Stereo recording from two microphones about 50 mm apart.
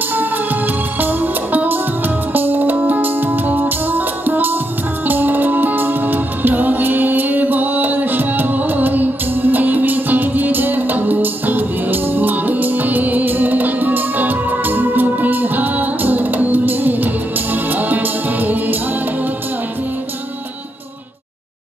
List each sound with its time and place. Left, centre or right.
0.9 s music: right